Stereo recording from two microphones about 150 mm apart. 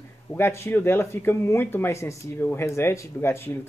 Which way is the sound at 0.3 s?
15° left (ahead or behind).